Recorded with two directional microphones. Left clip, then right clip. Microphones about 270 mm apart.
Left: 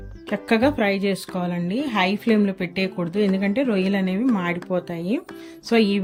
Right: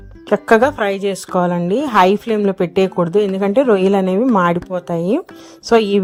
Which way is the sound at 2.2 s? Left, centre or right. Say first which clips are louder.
Right 5 dB; centre.